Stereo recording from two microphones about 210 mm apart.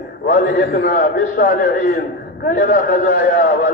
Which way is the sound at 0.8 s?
45° left (ahead or behind).